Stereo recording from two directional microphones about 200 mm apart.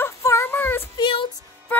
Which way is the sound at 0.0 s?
15° left (ahead or behind).